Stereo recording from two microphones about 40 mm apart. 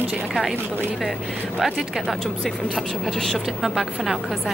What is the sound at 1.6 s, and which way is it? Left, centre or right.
A woman's voice, centre.